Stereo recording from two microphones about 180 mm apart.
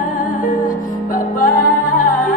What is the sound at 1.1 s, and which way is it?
Music, 50° left (ahead or behind).